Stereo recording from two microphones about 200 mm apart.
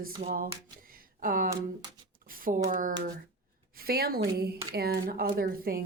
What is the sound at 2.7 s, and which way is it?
A woman's voice, 40° right (ahead or behind).